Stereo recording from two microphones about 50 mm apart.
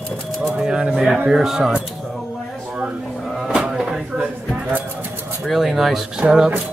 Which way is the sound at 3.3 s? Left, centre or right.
Centre.